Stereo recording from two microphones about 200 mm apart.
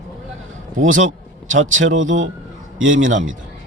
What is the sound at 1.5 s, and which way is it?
Speech, 75° right (ahead or behind).